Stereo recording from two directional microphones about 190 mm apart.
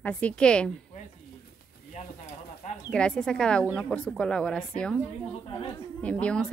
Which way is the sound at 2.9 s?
5° left (ahead or behind).